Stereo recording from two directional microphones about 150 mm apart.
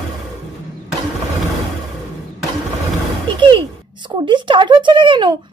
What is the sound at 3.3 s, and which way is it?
A child's voice, 30° right (ahead or behind).